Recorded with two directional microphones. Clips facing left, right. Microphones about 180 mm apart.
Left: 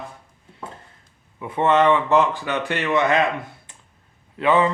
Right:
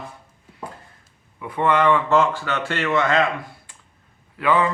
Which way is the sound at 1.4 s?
25° left (ahead or behind).